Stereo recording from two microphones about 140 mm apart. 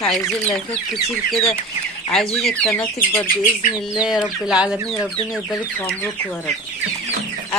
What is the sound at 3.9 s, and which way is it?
Speech, 5° right (ahead or behind).